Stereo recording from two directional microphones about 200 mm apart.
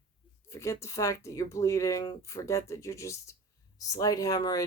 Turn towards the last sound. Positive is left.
turn(degrees=15)  # may be behind; listen again after turning